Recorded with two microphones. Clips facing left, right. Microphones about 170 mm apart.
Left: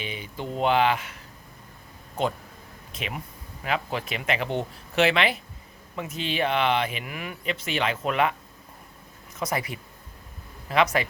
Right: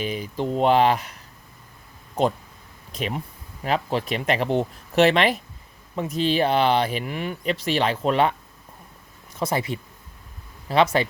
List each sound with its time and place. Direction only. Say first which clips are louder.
0.0 s speech: right 8 dB; 40° right (ahead or behind)
2.9 s speech: right 6 dB; 35° right (ahead or behind)